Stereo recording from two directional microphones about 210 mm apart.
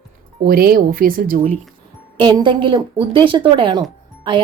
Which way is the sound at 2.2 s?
20° right (ahead or behind).